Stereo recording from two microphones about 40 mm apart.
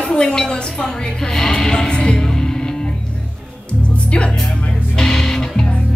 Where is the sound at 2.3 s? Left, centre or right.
Centre.